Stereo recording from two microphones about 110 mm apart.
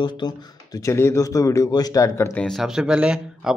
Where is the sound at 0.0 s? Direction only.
40° left (ahead or behind).